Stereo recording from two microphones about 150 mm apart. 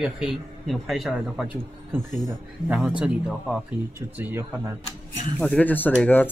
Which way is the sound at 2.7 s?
5° right (ahead or behind).